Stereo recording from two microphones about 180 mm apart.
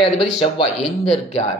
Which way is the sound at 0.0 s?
30° left (ahead or behind).